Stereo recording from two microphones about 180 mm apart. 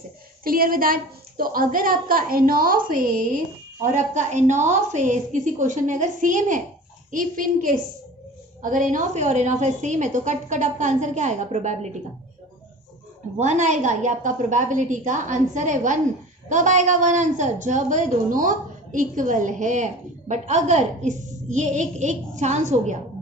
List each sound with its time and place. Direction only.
0.4 s a woman's voice: 55° right (ahead or behind)
13.4 s a woman's voice: 40° right (ahead or behind)